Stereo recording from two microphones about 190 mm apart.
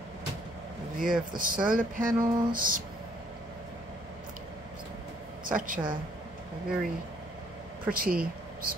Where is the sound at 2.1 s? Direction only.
20° right (ahead or behind).